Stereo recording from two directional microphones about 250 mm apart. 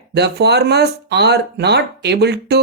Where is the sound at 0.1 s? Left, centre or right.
Right.